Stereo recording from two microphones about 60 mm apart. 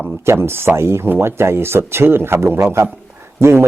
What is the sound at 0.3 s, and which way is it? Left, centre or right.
Speech, right.